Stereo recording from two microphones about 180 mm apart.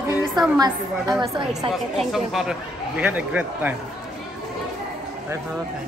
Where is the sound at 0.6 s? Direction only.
20° right (ahead or behind).